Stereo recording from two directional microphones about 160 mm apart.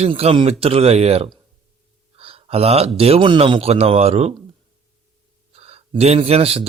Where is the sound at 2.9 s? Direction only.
40° right (ahead or behind).